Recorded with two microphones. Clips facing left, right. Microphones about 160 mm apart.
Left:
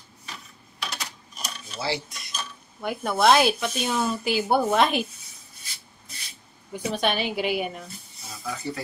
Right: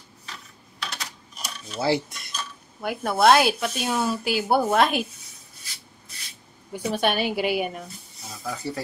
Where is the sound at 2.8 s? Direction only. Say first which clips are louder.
Right 2 dB; centre (ahead or behind).